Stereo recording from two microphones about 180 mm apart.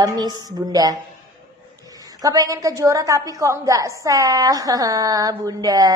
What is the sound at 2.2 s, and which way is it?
A woman's voice, 20° right (ahead or behind).